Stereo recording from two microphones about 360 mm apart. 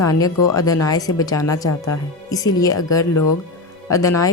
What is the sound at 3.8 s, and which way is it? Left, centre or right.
Speech, centre.